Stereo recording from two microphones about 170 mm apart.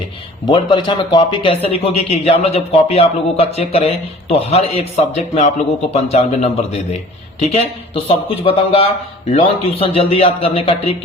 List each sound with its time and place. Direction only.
0.4 s speech: 30° left (ahead or behind)